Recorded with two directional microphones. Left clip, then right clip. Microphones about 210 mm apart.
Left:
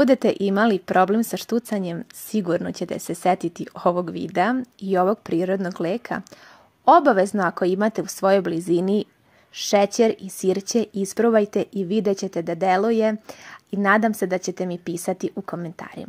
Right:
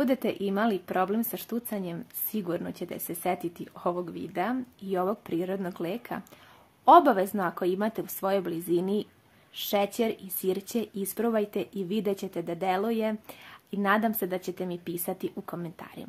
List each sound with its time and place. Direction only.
0.0 s speech: 35° left (ahead or behind)